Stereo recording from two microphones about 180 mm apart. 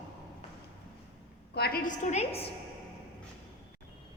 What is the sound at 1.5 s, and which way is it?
Speech, 60° left (ahead or behind).